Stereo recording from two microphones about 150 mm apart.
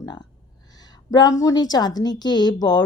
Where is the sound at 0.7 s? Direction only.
25° left (ahead or behind).